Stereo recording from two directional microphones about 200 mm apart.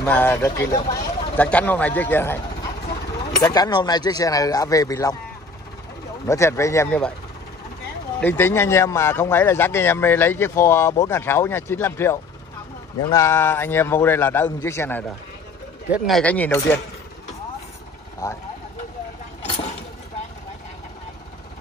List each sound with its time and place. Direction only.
0.0 s speech: 10° left (ahead or behind)
6.2 s speech: 15° left (ahead or behind)
8.2 s speech: 10° left (ahead or behind)
18.2 s speech: 15° left (ahead or behind)
19.4 s a sound: 25° left (ahead or behind)